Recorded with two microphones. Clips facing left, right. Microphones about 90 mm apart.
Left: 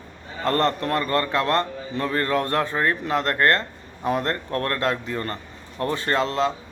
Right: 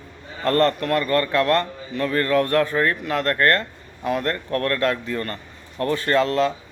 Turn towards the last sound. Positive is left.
turn(degrees=20)  # may be behind; listen again after turning